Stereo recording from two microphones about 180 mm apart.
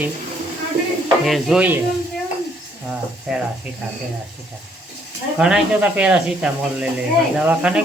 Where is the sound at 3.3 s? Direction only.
5° right (ahead or behind).